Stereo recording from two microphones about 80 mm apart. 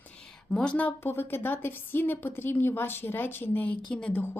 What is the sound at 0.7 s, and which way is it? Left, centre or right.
A woman's voice, left.